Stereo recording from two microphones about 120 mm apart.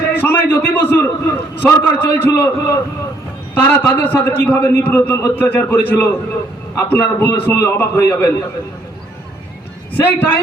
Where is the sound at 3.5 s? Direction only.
15° left (ahead or behind).